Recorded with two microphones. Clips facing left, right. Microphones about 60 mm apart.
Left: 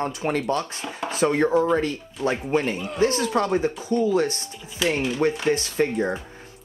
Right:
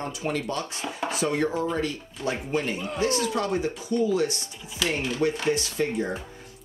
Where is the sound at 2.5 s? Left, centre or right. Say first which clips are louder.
Left 4 dB; left.